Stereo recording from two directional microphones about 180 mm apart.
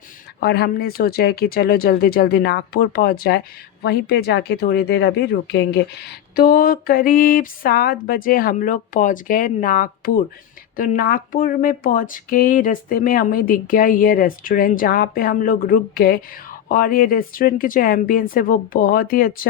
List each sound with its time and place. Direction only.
0.3 s speech: 60° left (ahead or behind)